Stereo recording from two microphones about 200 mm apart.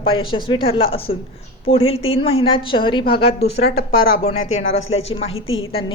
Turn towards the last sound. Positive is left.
turn(degrees=90)